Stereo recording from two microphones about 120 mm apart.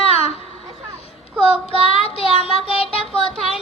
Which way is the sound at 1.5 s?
50° left (ahead or behind).